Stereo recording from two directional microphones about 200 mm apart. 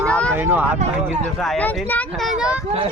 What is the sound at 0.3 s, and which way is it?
Speech, 10° right (ahead or behind).